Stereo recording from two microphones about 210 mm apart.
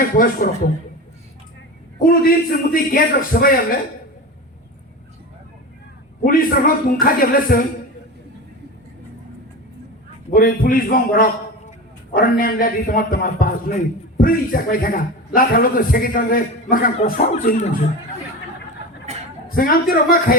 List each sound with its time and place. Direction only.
0.0 s a man's voice: 40° left (ahead or behind)
2.0 s a man's voice: 45° left (ahead or behind)
6.2 s a man's voice: 45° left (ahead or behind)
10.3 s a man's voice: 45° left (ahead or behind)
19.1 s a sound: 30° right (ahead or behind)
19.5 s a man's voice: 45° left (ahead or behind)